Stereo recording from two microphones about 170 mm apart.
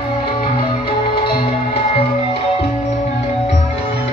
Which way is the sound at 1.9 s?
35° left (ahead or behind).